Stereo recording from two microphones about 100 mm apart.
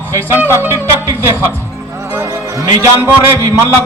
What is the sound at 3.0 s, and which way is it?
Music, 20° right (ahead or behind).